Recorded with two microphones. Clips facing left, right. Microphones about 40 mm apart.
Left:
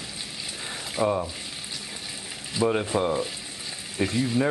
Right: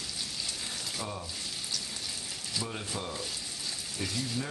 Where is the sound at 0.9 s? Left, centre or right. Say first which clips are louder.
Left 19 dB; left.